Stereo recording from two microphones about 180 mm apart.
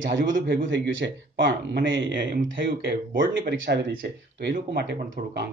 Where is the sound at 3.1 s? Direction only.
70° right (ahead or behind).